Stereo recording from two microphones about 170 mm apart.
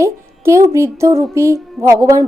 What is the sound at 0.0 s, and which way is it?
A woman's voice, 15° right (ahead or behind).